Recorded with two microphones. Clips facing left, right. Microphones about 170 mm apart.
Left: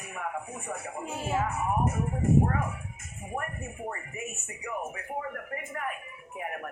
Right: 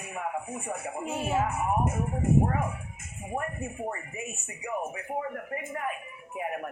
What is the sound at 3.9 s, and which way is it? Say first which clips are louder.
Speech: right 1 dB; 20° right (ahead or behind).